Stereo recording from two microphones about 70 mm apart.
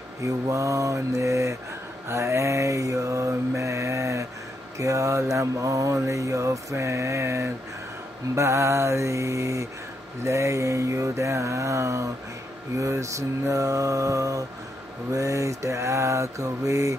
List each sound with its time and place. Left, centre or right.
0.2 s mantra: right